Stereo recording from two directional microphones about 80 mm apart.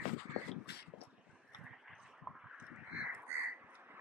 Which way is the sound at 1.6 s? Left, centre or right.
Centre.